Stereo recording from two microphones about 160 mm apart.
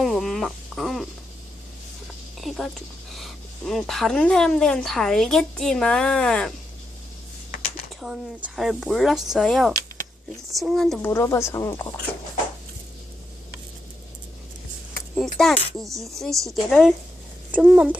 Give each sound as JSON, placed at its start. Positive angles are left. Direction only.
{"t": 0.0, "sound": "a sound", "side_deg": 0}
{"t": 3.2, "sound": "speech", "side_deg": 0}
{"t": 8.0, "sound": "speech", "side_deg": -5}
{"t": 11.1, "sound": "speech", "side_deg": 15}
{"t": 15.1, "sound": "speech", "side_deg": 0}